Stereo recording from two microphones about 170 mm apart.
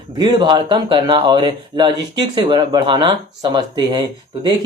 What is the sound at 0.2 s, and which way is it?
Speech, 25° right (ahead or behind).